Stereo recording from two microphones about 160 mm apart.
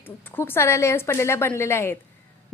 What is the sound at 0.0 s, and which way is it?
A woman's voice, 10° left (ahead or behind).